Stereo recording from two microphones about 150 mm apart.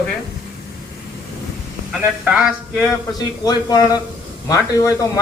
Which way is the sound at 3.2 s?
25° left (ahead or behind).